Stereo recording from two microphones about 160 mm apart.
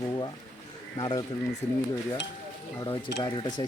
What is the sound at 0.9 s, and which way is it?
Speech, 25° left (ahead or behind).